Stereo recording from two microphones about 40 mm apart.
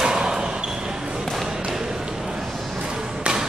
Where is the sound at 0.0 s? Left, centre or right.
Centre.